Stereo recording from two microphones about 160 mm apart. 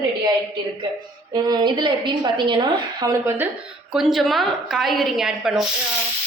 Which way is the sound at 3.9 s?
Centre (ahead or behind).